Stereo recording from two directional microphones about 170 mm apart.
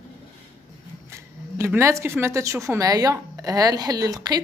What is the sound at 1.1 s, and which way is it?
Speech, 15° right (ahead or behind).